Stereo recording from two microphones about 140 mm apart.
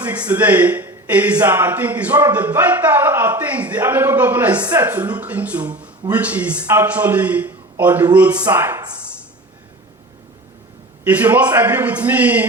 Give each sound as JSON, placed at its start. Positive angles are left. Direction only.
{"t": 0.0, "sound": "speech", "side_deg": -10}
{"t": 11.0, "sound": "speech", "side_deg": -10}